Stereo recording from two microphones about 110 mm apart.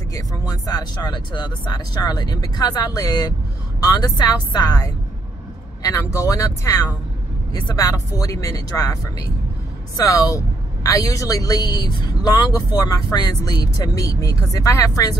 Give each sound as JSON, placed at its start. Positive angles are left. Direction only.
{"t": 0.1, "sound": "speech", "side_deg": 30}